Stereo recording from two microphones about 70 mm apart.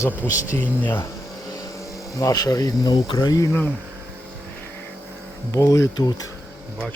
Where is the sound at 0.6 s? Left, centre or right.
Left.